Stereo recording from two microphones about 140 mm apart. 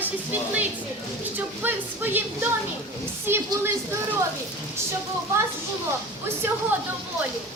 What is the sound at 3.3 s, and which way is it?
Speech, 20° right (ahead or behind).